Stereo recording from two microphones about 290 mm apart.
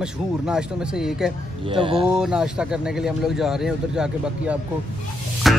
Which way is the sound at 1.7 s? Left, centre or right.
Centre.